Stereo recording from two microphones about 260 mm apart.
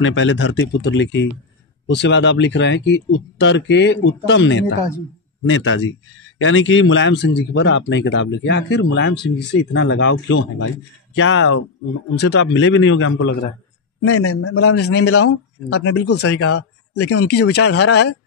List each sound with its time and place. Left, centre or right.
0.0 s speech: left
14.0 s a man's voice: left
17.1 s speech: left